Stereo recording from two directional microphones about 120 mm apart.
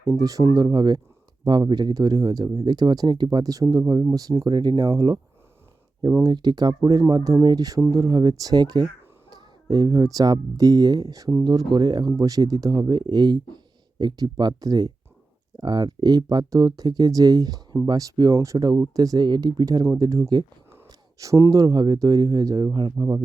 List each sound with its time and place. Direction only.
0.0 s speech: 30° right (ahead or behind)